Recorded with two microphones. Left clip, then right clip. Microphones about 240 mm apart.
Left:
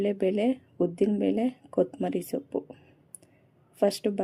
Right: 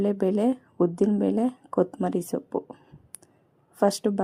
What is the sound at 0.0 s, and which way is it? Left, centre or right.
Speech, right.